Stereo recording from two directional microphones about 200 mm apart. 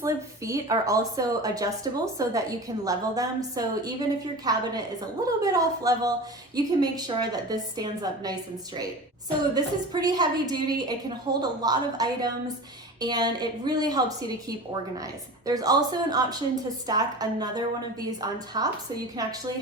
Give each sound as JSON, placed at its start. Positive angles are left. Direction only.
{"t": 0.0, "sound": "a woman's voice", "side_deg": -15}